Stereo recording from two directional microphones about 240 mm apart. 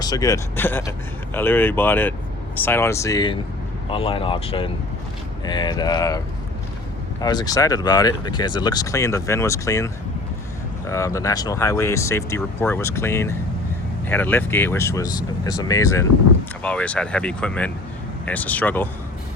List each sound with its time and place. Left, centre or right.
0.0 s speech: centre